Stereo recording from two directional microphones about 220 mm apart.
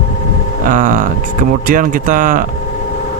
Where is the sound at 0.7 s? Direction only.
35° right (ahead or behind).